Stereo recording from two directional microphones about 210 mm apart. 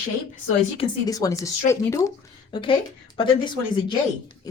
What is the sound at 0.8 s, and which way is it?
Speech, 15° left (ahead or behind).